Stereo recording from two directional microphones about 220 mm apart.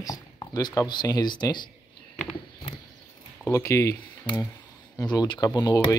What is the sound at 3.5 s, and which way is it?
Speech, 15° left (ahead or behind).